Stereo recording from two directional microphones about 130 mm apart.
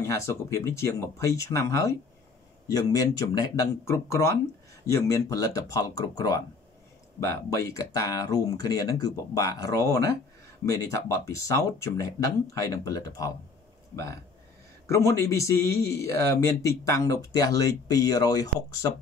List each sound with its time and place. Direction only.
0.0 s a man's voice: 20° left (ahead or behind)
14.9 s a man's voice: 20° left (ahead or behind)